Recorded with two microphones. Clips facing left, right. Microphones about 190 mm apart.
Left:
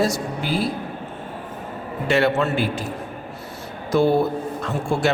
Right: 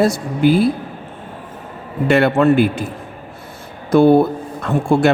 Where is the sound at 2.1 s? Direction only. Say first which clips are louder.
Right 6 dB; 55° right (ahead or behind).